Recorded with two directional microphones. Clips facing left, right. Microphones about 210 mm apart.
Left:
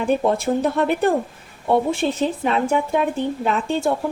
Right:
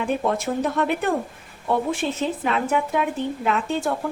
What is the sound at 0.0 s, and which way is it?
Speech, 30° left (ahead or behind).